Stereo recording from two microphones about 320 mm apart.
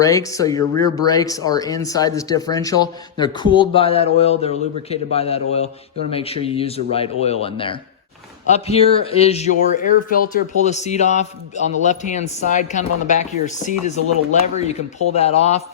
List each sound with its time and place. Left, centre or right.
0.0 s a man's voice: centre